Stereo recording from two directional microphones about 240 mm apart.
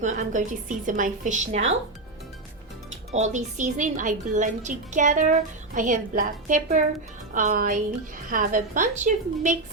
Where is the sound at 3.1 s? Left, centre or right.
Right.